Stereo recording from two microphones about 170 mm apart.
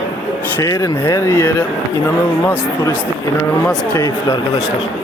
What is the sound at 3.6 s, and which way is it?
Speech, 5° left (ahead or behind).